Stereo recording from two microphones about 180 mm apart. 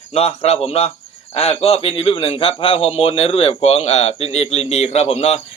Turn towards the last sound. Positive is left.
turn(degrees=35)  # may be behind; listen again after turning